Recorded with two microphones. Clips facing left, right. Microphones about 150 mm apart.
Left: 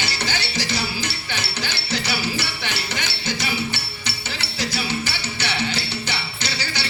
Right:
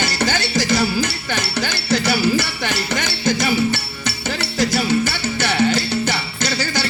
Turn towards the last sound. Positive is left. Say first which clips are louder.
# right 7 dB
turn(degrees=-45)  # may be behind; listen again after turning